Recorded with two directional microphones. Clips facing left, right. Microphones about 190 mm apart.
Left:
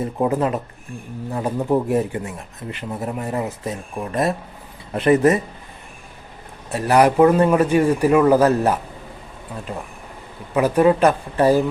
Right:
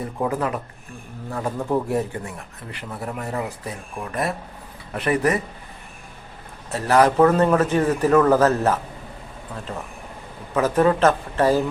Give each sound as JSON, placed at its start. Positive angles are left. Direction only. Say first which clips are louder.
{"t": 0.0, "sound": "speech", "louder": "left 4 dB", "side_deg": 25}
{"t": 6.7, "sound": "a man's voice", "louder": "left 2 dB", "side_deg": 15}
{"t": 10.5, "sound": "a man's voice", "louder": "left 3 dB", "side_deg": 15}